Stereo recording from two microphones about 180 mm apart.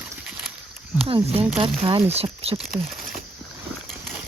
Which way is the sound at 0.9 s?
30° right (ahead or behind).